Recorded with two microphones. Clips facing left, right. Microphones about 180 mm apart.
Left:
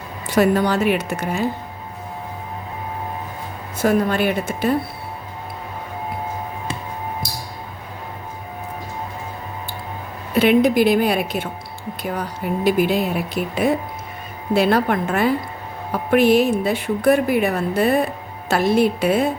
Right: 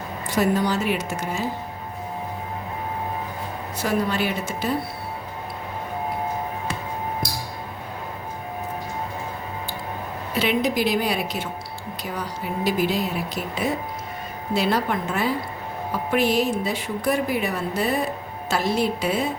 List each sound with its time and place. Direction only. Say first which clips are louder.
0.3 s a woman's voice: left 5 dB; 65° left (ahead or behind)
3.8 s a woman's voice: left 6 dB; 50° left (ahead or behind)
10.3 s a woman's voice: left 8 dB; 55° left (ahead or behind)